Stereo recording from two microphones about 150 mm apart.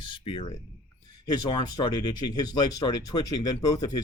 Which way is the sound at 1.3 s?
25° left (ahead or behind).